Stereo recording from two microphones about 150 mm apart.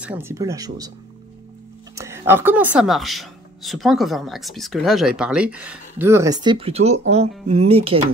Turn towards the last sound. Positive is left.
turn(degrees=-40)  # may be behind; listen again after turning